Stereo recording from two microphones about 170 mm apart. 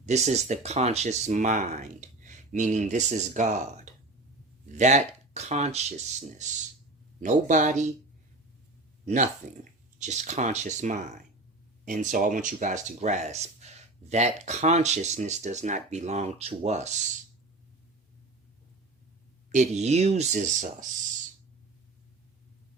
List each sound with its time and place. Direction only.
0.0 s speech: 40° right (ahead or behind)
9.0 s speech: 45° right (ahead or behind)
19.5 s speech: 45° right (ahead or behind)